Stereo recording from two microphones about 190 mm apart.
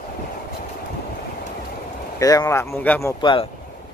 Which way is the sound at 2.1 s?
15° left (ahead or behind).